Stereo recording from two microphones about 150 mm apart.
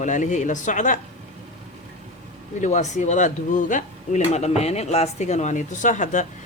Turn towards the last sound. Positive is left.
turn(degrees=55)  # may be behind; listen again after turning